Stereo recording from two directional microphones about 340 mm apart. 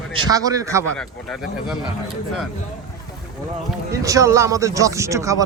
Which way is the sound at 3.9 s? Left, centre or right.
Centre.